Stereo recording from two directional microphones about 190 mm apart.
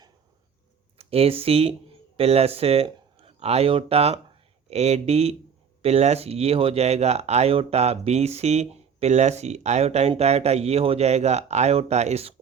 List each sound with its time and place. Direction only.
0.9 s speech: 30° right (ahead or behind)